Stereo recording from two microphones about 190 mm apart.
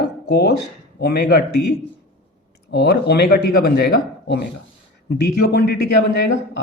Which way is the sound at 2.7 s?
60° left (ahead or behind).